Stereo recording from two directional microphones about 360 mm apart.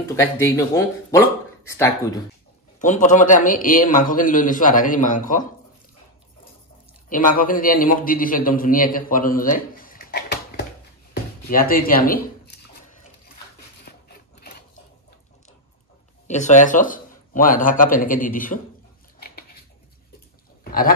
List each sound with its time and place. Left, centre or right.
0.1 s speech: centre
2.8 s a man's voice: left
7.1 s a man's voice: left
11.4 s a sound: left
16.3 s a man's voice: centre
19.1 s a sound: left